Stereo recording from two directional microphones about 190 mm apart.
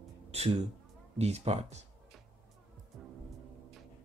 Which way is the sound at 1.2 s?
35° right (ahead or behind).